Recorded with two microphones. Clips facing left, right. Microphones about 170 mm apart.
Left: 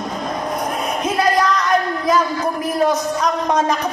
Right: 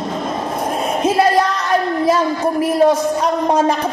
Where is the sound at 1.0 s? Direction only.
30° right (ahead or behind).